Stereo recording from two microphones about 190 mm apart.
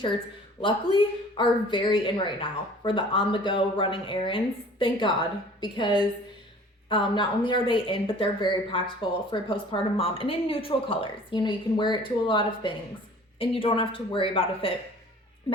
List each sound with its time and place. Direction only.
0.6 s a woman's voice: 25° left (ahead or behind)